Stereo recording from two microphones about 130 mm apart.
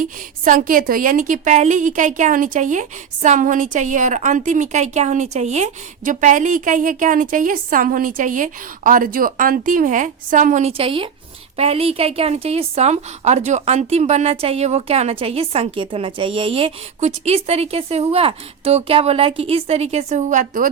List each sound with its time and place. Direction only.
0.0 s a woman's voice: 90° right
10.7 s a woman's voice: 45° right (ahead or behind)
17.0 s a woman's voice: 55° right (ahead or behind); by 20.7 s 85° right